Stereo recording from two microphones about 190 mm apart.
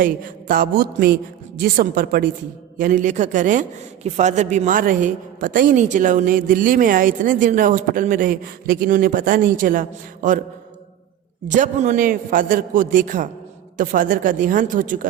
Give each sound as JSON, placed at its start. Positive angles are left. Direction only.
{"t": 0.0, "sound": "a man's voice", "side_deg": -50}
{"t": 10.2, "sound": "mantra", "side_deg": -40}
{"t": 11.4, "sound": "a man's voice", "side_deg": -40}